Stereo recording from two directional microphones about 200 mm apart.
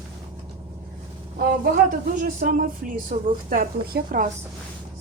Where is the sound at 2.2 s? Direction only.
40° right (ahead or behind).